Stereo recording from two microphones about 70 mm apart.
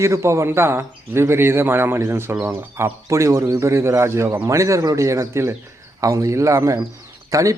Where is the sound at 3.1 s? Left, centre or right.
Right.